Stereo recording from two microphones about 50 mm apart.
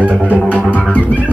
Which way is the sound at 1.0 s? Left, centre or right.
Right.